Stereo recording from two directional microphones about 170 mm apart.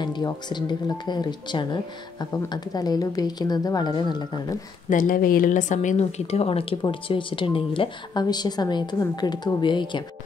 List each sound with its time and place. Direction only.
0.0 s speech: 25° left (ahead or behind)
4.8 s a woman's voice: 50° left (ahead or behind); by 10.0 s 25° left (ahead or behind)